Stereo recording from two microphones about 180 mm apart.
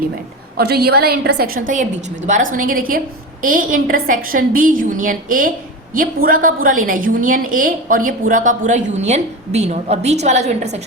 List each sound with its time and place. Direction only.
0.5 s a woman's voice: 60° right (ahead or behind); by 10.8 s 40° right (ahead or behind)